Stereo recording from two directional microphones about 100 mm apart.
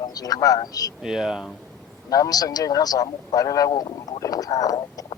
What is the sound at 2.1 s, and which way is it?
Speech, 40° left (ahead or behind).